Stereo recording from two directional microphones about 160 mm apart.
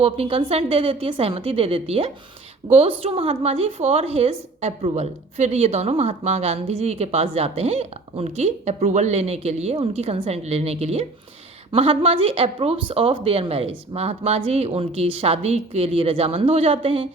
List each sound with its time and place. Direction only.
0.0 s speech: 35° right (ahead or behind)